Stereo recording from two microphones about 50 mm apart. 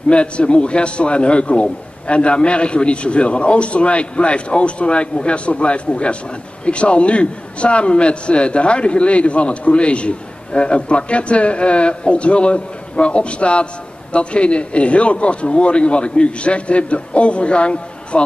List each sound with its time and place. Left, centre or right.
0.1 s a man's voice: left